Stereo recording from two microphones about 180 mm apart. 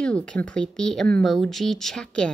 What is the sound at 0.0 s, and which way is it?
A woman's voice, 5° left (ahead or behind).